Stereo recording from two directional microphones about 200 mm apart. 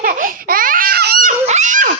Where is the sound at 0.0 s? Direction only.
45° right (ahead or behind).